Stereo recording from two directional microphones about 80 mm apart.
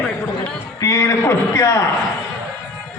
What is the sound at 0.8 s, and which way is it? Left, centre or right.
A man's voice, left.